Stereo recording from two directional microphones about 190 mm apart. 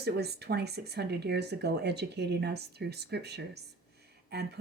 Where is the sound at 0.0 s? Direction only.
60° right (ahead or behind).